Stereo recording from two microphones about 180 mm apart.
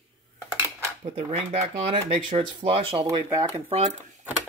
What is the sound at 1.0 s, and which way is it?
Speech, 40° right (ahead or behind).